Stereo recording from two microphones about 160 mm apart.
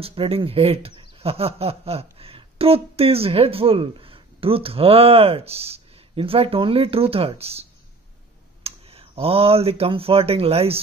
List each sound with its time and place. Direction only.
0.0 s speech: 35° right (ahead or behind)
8.6 s speech: 40° right (ahead or behind)